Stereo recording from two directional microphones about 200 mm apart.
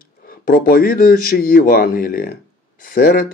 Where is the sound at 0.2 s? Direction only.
45° left (ahead or behind).